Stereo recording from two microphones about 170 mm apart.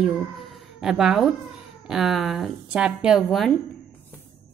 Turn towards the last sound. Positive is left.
turn(degrees=0)  # may be behind; listen again after turning